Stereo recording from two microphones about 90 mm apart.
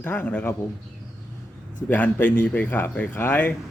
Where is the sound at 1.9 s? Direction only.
20° left (ahead or behind).